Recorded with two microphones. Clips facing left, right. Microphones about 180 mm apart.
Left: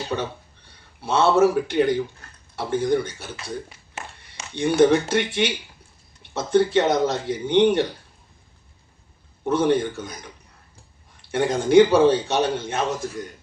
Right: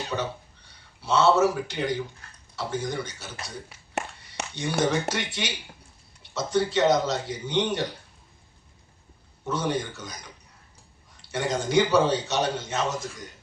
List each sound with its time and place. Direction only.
1.0 s speech: 55° left (ahead or behind)
4.5 s speech: 55° left (ahead or behind)
9.4 s speech: 55° left (ahead or behind)
11.2 s speech: 55° left (ahead or behind)